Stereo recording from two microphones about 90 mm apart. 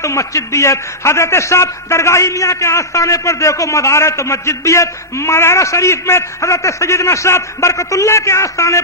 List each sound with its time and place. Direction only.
0.0 s a man's voice: 35° left (ahead or behind)